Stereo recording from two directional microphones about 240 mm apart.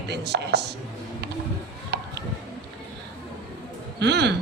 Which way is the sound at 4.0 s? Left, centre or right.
Right.